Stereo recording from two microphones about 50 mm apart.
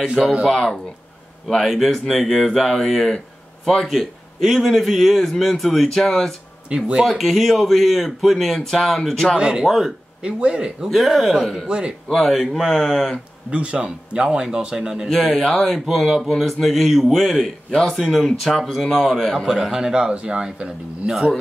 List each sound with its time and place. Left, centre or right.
0.0 s speech: centre
1.5 s a man's voice: centre
6.7 s speech: centre
7.1 s a man's voice: centre
9.4 s speech: centre
9.7 s a man's voice: centre
10.2 s speech: centre
10.9 s a man's voice: centre
11.5 s speech: centre
12.1 s a man's voice: centre
13.5 s a man's voice: right